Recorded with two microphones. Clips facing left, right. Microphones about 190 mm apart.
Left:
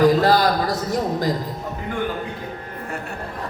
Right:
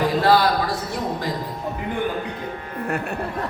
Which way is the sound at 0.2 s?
40° left (ahead or behind).